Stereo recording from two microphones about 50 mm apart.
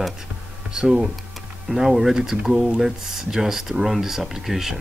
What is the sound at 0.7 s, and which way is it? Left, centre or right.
Speech, centre.